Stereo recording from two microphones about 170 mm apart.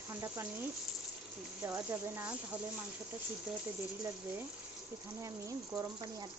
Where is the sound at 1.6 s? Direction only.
15° right (ahead or behind).